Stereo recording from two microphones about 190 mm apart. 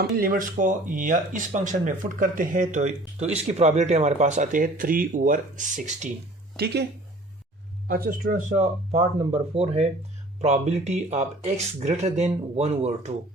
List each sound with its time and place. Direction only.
0.0 s speech: 50° right (ahead or behind)
7.9 s speech: 50° right (ahead or behind); by 13.1 s 35° right (ahead or behind)